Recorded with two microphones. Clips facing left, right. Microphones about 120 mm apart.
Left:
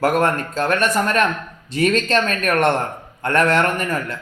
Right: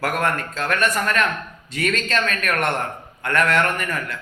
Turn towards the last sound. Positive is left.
turn(degrees=30)  # may be behind; listen again after turning